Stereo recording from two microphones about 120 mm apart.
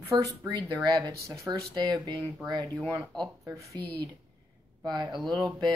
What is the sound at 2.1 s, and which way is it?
Speech, 10° left (ahead or behind).